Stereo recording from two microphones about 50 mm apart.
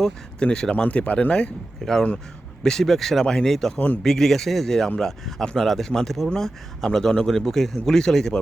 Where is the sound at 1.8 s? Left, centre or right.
Centre.